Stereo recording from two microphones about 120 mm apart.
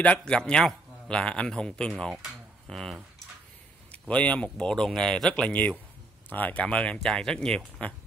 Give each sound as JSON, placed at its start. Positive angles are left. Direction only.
{"t": 0.0, "sound": "a man's voice", "side_deg": 10}
{"t": 4.1, "sound": "speech", "side_deg": 10}